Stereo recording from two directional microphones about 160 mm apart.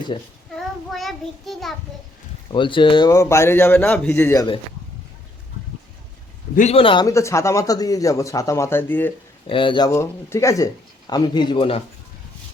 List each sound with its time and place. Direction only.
0.9 s child singing: centre (ahead or behind)
2.5 s speech: 30° left (ahead or behind); by 4.4 s 15° left (ahead or behind)
6.6 s a man's voice: 40° left (ahead or behind)
7.1 s speech: 20° left (ahead or behind)
9.5 s a man's voice: 30° left (ahead or behind)
9.9 s speech: 15° left (ahead or behind); by 11.8 s 30° left (ahead or behind)